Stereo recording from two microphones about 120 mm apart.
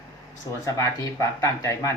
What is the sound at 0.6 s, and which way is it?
Speech, 25° left (ahead or behind).